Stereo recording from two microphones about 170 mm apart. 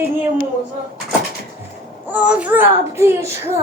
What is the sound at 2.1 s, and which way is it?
Speech, 10° right (ahead or behind).